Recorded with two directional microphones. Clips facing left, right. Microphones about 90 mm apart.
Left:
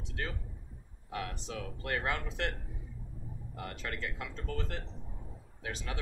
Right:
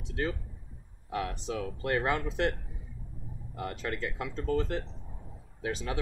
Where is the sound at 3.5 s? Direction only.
20° right (ahead or behind).